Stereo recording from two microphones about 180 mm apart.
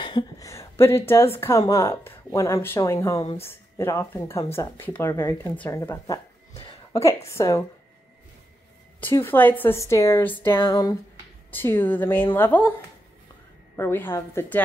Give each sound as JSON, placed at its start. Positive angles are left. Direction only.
{"t": 0.0, "sound": "a woman's voice", "side_deg": 20}
{"t": 9.1, "sound": "speech", "side_deg": 10}
{"t": 13.7, "sound": "speech", "side_deg": 10}